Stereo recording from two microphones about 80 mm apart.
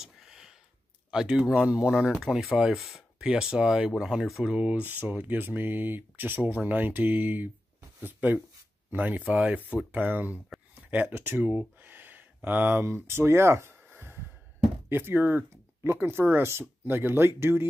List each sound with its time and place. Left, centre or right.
0.0 s a sound: centre
1.1 s speech: centre
4.6 s speech: centre
11.1 s a sound: right
12.4 s speech: right
12.8 s speech: right